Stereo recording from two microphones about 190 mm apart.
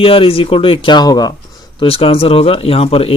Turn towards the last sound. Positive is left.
turn(degrees=30)  # may be behind; listen again after turning